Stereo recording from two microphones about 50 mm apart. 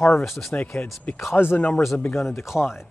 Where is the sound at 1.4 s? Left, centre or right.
Left.